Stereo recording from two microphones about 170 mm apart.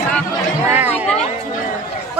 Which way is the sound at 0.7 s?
10° right (ahead or behind).